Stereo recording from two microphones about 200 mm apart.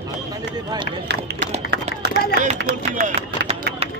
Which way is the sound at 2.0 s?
55° right (ahead or behind).